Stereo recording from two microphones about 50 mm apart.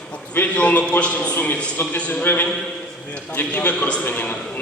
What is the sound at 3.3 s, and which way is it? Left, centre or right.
A man's voice, left.